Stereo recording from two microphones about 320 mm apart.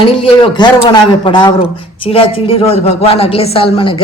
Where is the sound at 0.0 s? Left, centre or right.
Centre.